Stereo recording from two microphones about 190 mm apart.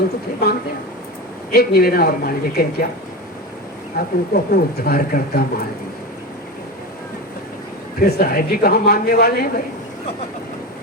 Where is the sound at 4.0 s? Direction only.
55° left (ahead or behind).